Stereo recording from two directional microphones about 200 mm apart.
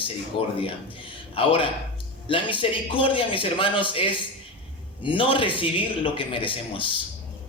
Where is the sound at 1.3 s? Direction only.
25° left (ahead or behind).